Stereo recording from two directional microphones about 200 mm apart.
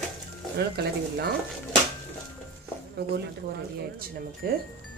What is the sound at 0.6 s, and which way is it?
Speech, 55° right (ahead or behind).